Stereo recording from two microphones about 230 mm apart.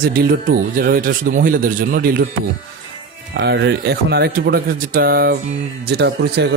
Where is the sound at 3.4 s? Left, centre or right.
Right.